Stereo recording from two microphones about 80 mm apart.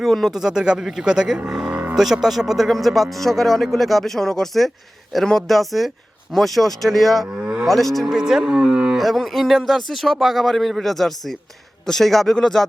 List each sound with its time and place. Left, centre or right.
0.0 s speech: centre
1.7 s a sound: right
2.0 s speech: centre
7.3 s cattle: centre
7.7 s speech: centre
9.0 s speech: centre